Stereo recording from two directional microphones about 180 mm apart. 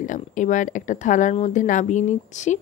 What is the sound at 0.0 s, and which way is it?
Speech, 45° left (ahead or behind).